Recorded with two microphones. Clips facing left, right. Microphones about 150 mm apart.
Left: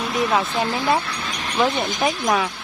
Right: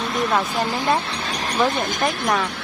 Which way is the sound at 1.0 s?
30° right (ahead or behind).